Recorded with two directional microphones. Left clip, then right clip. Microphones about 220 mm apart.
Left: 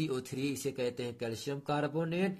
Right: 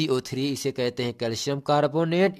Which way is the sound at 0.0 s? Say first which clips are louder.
Right 10 dB; 40° right (ahead or behind).